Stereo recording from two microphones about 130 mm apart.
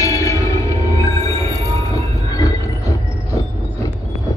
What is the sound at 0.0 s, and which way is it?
Music, 25° left (ahead or behind).